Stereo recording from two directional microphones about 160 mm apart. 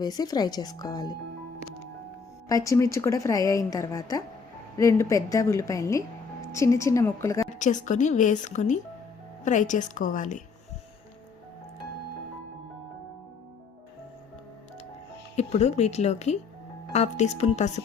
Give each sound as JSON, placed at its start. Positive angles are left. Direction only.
{"t": 0.0, "sound": "a woman's voice", "side_deg": 25}
{"t": 2.5, "sound": "a woman's voice", "side_deg": 20}
{"t": 7.6, "sound": "a woman's voice", "side_deg": 50}
{"t": 15.4, "sound": "a woman's voice", "side_deg": 45}